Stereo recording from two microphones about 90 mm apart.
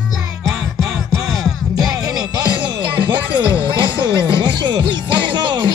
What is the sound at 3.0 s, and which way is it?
Music, 60° right (ahead or behind).